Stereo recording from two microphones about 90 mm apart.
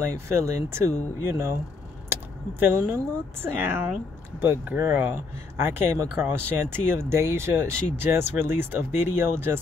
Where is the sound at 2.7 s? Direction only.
25° right (ahead or behind).